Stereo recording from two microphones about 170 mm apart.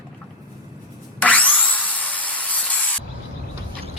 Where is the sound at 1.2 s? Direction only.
10° left (ahead or behind).